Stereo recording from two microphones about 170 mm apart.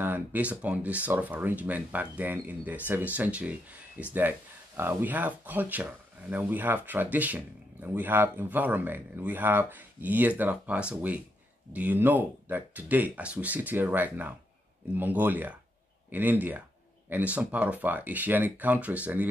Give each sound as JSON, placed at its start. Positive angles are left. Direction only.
{"t": 0.0, "sound": "speech", "side_deg": -10}